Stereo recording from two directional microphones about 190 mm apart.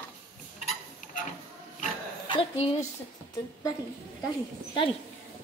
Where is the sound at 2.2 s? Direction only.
30° left (ahead or behind).